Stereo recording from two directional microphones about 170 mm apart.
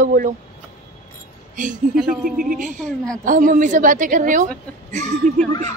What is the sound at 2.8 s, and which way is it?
Speech, 5° left (ahead or behind).